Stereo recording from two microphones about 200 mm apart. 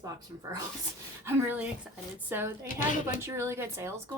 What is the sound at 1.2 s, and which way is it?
Speech, 10° right (ahead or behind).